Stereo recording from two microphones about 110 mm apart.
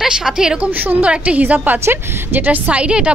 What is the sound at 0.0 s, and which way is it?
A woman's voice, 5° right (ahead or behind).